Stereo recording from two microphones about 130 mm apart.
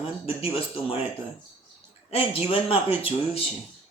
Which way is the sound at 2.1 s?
45° left (ahead or behind).